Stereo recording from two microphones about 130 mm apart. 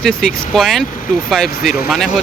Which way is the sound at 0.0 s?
Centre (ahead or behind).